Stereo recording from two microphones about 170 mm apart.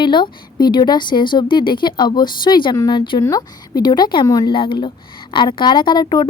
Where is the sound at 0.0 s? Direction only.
25° left (ahead or behind).